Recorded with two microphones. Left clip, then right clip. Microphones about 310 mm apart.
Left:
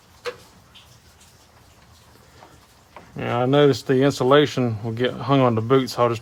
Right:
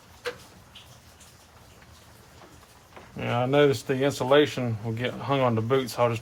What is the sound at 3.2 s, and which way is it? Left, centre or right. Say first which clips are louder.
Speech: left 4 dB; left.